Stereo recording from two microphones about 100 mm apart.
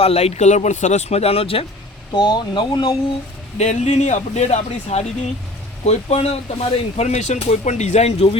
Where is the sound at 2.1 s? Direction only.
50° left (ahead or behind).